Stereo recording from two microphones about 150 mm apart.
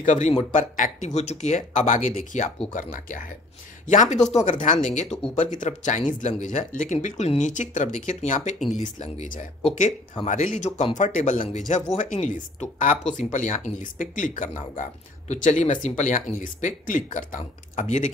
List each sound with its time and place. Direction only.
0.0 s speech: 55° left (ahead or behind)